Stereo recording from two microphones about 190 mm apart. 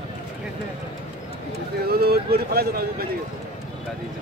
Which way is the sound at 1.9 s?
55° right (ahead or behind).